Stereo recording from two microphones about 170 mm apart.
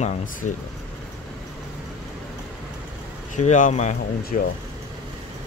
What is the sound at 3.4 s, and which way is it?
Speech, 45° left (ahead or behind).